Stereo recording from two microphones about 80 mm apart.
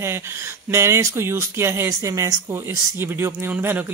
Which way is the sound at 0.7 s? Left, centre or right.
Right.